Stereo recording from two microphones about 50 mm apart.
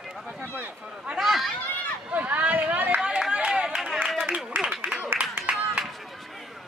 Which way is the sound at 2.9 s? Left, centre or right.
Centre.